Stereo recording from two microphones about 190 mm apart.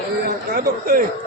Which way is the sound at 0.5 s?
50° right (ahead or behind).